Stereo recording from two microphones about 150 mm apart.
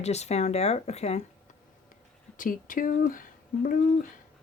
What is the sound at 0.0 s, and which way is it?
Speech, 45° left (ahead or behind).